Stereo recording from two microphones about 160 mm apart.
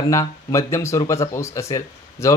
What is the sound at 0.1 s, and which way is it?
Speech, 20° left (ahead or behind).